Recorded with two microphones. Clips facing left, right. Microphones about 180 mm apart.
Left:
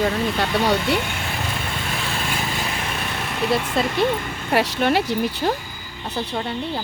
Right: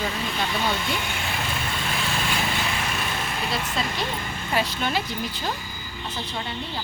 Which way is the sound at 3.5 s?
55° left (ahead or behind).